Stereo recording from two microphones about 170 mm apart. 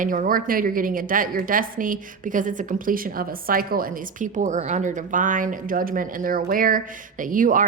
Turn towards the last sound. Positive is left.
turn(degrees=-50)  # may be behind; listen again after turning